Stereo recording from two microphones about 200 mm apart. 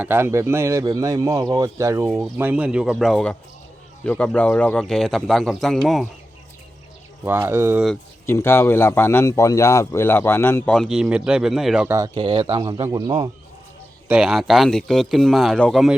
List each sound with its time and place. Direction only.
0.0 s a man's voice: 10° right (ahead or behind)
7.3 s speech: 10° right (ahead or behind)
8.3 s speech: 10° left (ahead or behind)
11.9 s speech: 15° right (ahead or behind)
14.1 s a man's voice: 5° right (ahead or behind)